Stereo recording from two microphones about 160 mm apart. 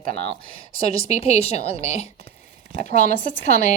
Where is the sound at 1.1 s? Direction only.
40° left (ahead or behind).